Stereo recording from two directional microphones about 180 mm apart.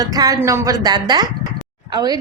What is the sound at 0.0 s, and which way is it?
A woman's voice, 20° right (ahead or behind).